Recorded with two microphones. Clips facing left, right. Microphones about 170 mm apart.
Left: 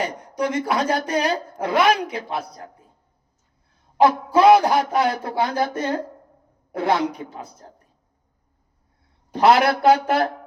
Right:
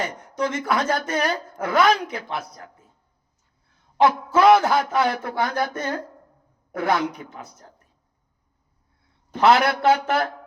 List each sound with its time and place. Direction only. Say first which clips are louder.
0.0 s speech: left 2 dB; 35° left (ahead or behind)
4.0 s speech: left 2 dB; 30° left (ahead or behind)
9.3 s speech: left 2 dB; 30° left (ahead or behind)